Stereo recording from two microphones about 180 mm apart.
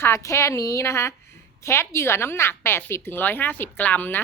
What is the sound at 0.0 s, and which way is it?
A woman's voice, 15° left (ahead or behind).